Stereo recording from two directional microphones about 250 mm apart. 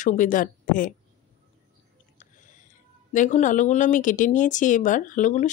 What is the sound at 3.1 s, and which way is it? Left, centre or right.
A woman's voice, left.